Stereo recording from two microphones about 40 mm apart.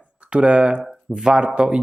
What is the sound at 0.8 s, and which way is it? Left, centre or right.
Speech, centre.